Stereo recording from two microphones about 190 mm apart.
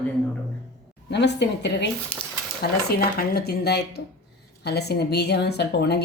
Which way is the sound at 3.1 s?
55° left (ahead or behind).